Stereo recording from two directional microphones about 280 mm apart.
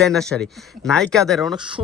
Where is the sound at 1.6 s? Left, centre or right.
Centre.